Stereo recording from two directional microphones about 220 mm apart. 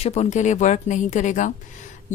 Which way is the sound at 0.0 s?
30° left (ahead or behind).